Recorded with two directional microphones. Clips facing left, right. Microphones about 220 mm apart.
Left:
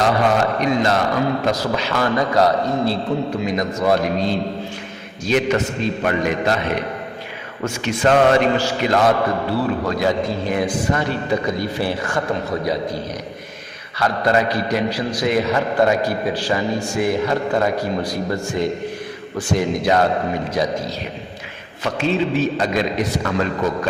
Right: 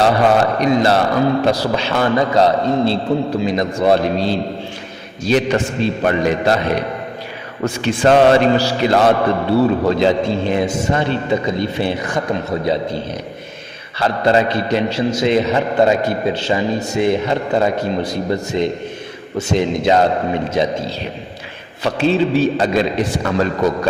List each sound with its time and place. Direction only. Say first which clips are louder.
0.6 s a man's voice: right 4 dB; 35° right (ahead or behind)
14.0 s a man's voice: right 3 dB; 25° right (ahead or behind)